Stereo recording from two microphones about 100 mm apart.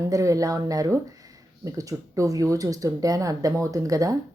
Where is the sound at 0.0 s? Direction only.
30° right (ahead or behind).